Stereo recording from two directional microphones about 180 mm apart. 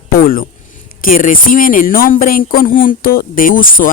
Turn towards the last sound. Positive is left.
turn(degrees=50)  # may be behind; listen again after turning